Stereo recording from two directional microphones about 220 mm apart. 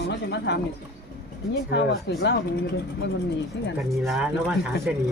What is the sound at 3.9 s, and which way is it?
Speech, centre (ahead or behind).